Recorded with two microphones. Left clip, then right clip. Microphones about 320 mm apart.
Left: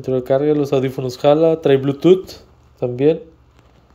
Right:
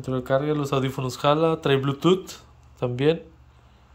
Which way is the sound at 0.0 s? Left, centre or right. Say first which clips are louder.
Left 8 dB; centre.